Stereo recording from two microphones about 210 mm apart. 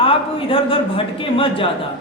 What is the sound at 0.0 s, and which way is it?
A man's voice, 25° left (ahead or behind).